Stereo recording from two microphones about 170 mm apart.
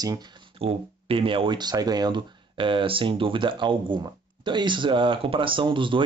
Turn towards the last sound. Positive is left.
turn(degrees=-30)  # may be behind; listen again after turning